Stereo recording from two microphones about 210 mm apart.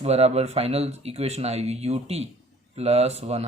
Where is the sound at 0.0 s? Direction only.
30° right (ahead or behind).